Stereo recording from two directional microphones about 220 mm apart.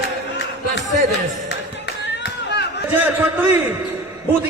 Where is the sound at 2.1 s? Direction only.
50° left (ahead or behind).